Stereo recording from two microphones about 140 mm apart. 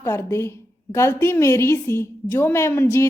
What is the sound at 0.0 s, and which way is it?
A woman's voice, 20° left (ahead or behind).